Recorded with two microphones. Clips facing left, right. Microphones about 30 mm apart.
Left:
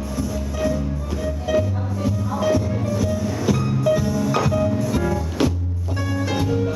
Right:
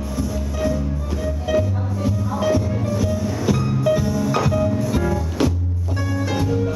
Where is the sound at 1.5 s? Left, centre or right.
Centre.